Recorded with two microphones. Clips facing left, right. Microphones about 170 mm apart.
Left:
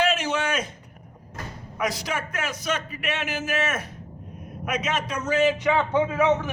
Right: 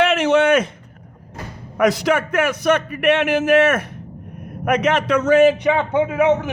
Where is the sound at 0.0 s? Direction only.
60° right (ahead or behind).